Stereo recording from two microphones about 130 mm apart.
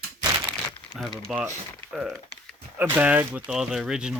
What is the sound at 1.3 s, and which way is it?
Speech, centre (ahead or behind).